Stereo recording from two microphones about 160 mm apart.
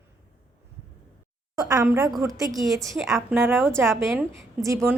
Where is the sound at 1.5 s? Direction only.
20° right (ahead or behind).